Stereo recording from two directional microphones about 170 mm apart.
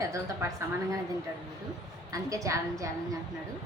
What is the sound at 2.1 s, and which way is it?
Speech, 20° right (ahead or behind).